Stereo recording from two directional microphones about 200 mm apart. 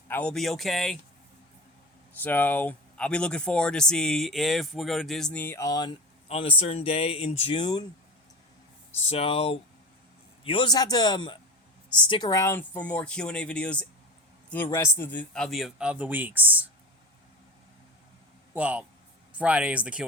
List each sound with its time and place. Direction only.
0.1 s speech: 5° left (ahead or behind)
2.2 s speech: 10° left (ahead or behind)
6.2 s speech: 30° left (ahead or behind)
9.0 s speech: 30° left (ahead or behind); by 16.6 s 10° right (ahead or behind)
18.5 s speech: 5° right (ahead or behind)